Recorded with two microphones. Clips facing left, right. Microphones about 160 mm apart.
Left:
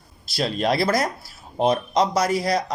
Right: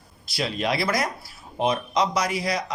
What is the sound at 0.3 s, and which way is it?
Speech, 40° left (ahead or behind).